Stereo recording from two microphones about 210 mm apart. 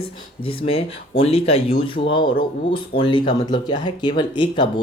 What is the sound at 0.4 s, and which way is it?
Speech, 25° left (ahead or behind).